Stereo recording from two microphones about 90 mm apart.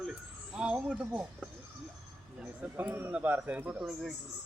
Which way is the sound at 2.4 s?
15° right (ahead or behind).